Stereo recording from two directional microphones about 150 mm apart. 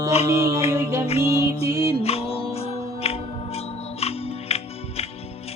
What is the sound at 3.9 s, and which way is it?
Music, 45° left (ahead or behind).